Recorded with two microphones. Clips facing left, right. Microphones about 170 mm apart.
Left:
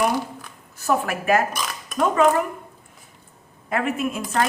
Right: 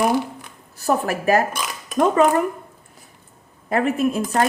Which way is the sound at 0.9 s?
35° right (ahead or behind).